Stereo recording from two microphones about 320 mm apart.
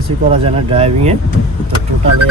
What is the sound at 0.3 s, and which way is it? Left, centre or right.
Speech, centre.